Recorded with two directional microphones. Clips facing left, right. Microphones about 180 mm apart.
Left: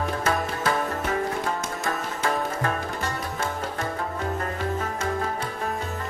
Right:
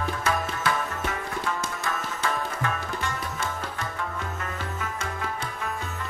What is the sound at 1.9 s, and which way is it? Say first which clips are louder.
Music: left 3 dB; 35° left (ahead or behind).